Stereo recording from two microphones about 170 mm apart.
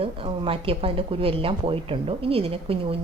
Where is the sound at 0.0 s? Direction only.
30° right (ahead or behind).